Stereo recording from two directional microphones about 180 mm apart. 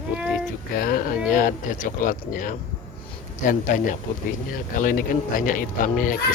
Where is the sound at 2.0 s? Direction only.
50° left (ahead or behind).